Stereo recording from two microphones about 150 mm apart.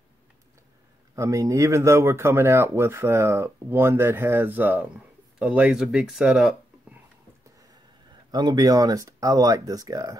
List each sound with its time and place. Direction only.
1.1 s speech: 20° right (ahead or behind)
8.3 s speech: 30° right (ahead or behind)